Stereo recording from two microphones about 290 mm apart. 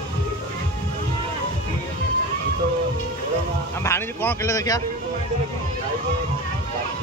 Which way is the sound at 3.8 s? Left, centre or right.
Centre.